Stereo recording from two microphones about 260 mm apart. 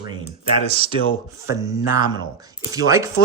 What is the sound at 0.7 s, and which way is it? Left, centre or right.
Speech, right.